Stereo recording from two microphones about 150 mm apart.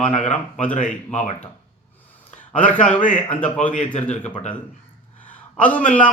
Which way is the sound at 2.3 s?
50° left (ahead or behind).